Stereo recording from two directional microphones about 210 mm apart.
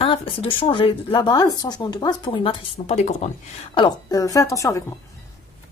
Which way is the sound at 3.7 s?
20° left (ahead or behind).